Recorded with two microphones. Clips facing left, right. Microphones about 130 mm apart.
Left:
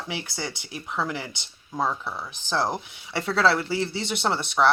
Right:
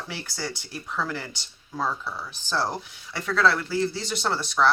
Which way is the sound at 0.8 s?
15° left (ahead or behind).